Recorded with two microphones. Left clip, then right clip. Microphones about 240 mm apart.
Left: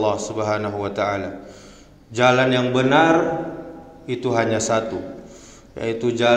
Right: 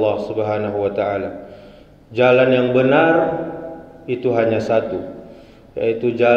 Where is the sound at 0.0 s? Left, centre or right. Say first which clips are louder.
Right 3 dB; left.